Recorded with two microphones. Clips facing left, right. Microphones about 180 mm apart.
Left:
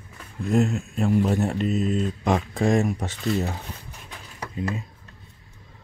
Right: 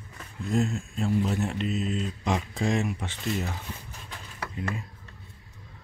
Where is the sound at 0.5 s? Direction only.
65° left (ahead or behind); by 3.5 s 45° left (ahead or behind).